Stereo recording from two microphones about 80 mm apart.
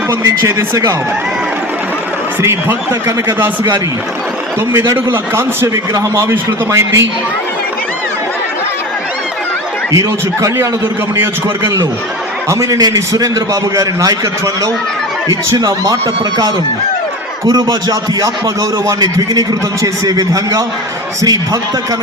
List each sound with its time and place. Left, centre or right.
2.4 s a man's voice: right
4.9 s a man's voice: right
9.9 s a man's voice: right
17.4 s speech: right